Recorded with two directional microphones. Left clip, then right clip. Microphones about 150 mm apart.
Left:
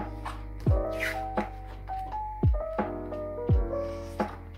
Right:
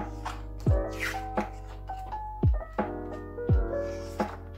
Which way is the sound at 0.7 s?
20° right (ahead or behind).